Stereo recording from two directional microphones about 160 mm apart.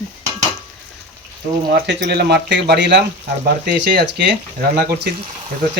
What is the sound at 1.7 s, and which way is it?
Speech, 90° right.